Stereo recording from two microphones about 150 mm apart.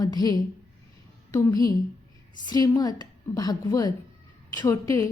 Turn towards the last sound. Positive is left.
turn(degrees=20)  # may be behind; listen again after turning